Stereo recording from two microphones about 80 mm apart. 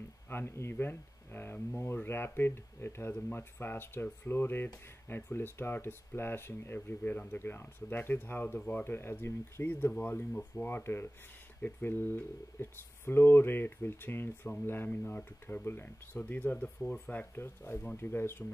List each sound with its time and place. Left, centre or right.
0.3 s speech: left; by 17.0 s centre
17.0 s speech: left